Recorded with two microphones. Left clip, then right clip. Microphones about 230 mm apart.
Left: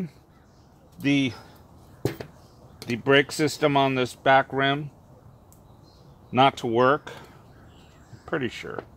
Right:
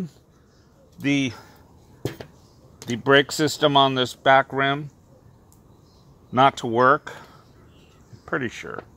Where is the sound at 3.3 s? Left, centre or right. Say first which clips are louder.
Right 3 dB; right.